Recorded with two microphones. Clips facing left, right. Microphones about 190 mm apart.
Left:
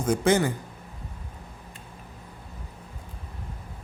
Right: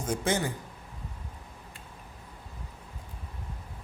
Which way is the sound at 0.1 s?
80° left.